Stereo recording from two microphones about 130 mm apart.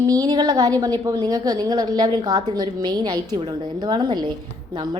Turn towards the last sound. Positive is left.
turn(degrees=-35)  # may be behind; listen again after turning